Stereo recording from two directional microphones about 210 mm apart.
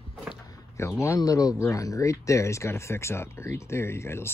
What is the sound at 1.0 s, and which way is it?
Speech, 15° left (ahead or behind).